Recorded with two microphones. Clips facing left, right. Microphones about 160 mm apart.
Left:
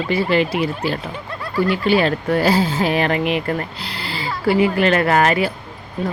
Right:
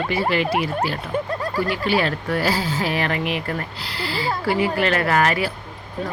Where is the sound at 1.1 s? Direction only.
50° right (ahead or behind).